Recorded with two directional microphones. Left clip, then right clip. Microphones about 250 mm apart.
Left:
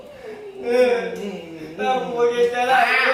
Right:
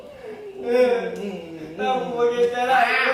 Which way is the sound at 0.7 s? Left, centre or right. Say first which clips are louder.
Left 1 dB; centre.